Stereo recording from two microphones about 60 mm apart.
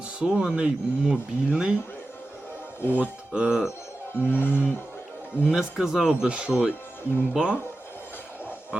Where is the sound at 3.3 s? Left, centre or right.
Centre.